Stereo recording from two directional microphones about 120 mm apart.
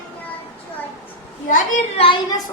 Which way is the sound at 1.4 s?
90° left.